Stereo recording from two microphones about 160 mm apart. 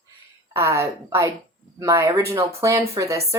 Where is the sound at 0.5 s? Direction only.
20° right (ahead or behind).